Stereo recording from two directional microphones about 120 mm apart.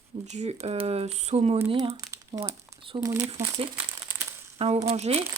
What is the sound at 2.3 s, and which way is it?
Speech, 40° right (ahead or behind).